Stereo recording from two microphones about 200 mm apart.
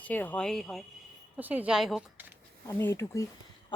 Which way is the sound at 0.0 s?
10° left (ahead or behind).